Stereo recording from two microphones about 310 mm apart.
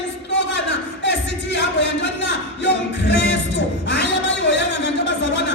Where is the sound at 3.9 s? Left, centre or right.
Left.